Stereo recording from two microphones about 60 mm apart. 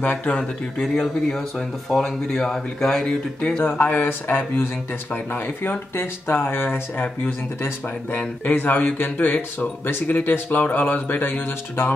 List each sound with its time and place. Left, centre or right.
0.0 s speech: left
0.9 s speech: centre
3.6 s speech: left